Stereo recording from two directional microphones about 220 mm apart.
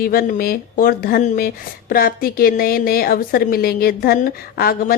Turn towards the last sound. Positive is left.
turn(degrees=40)  # may be behind; listen again after turning